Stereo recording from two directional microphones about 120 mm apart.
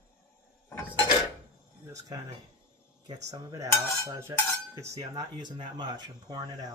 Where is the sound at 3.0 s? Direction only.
30° right (ahead or behind).